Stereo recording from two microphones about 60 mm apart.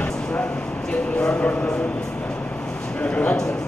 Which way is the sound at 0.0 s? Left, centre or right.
Left.